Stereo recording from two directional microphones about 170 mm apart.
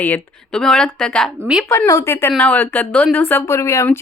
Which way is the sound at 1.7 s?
20° left (ahead or behind).